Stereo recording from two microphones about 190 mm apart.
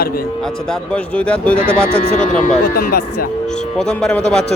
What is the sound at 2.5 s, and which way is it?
Speech, 50° left (ahead or behind).